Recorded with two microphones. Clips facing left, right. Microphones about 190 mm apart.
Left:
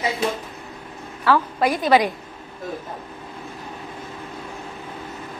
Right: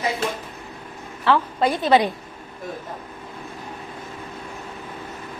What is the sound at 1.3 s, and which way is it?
Speech, 30° right (ahead or behind).